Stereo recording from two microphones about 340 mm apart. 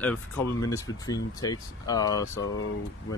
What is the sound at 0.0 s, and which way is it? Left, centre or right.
Speech, centre.